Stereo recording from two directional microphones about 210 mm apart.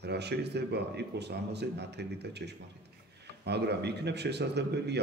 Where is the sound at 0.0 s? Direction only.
55° right (ahead or behind).